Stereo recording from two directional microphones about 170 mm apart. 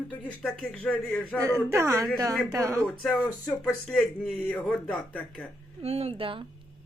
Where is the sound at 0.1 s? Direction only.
5° left (ahead or behind).